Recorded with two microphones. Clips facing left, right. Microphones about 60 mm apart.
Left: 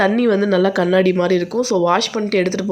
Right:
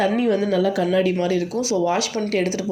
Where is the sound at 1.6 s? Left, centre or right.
Left.